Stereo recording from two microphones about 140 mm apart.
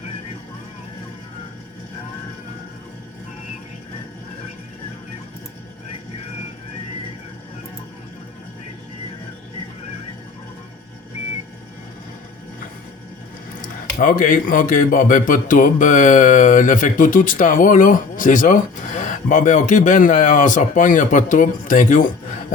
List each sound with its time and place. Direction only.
13.6 s speech: 70° left (ahead or behind)